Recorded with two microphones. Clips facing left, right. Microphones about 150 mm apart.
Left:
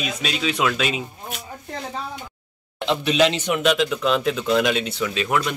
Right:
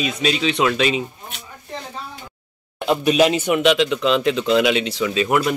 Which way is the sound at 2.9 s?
45° right (ahead or behind).